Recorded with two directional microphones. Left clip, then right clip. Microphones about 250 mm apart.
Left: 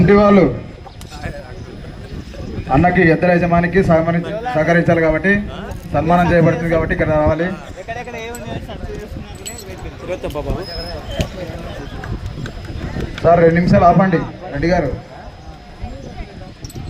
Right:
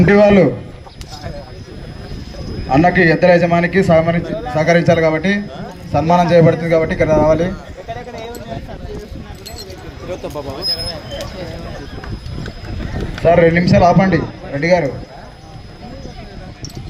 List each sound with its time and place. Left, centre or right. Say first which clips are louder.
0.0 s a man's voice: right 1 dB; centre
2.7 s a man's voice: right 1 dB; centre
7.9 s speech: left 1 dB; centre
10.1 s speech: left 2 dB; centre
13.2 s a man's voice: even; right